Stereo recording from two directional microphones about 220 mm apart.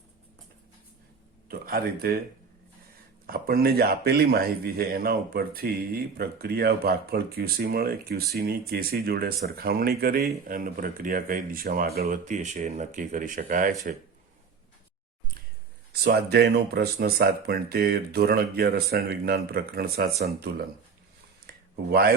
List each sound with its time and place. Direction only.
1.5 s speech: 40° right (ahead or behind)
3.2 s speech: 45° right (ahead or behind)
15.9 s speech: 45° right (ahead or behind)
21.4 s a sound: 45° right (ahead or behind)